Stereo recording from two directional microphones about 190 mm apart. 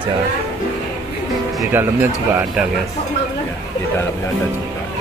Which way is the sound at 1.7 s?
10° right (ahead or behind).